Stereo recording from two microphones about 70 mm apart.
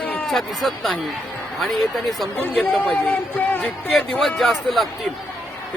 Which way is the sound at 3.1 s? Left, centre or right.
Left.